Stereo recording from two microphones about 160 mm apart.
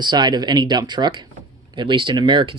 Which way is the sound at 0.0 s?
25° right (ahead or behind).